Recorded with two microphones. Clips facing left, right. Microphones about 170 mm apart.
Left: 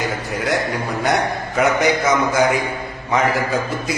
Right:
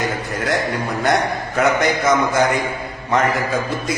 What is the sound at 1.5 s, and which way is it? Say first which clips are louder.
Speech: left 1 dB; 5° left (ahead or behind).